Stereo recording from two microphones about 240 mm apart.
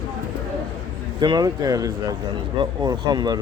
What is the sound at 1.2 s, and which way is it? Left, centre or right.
Speech, centre.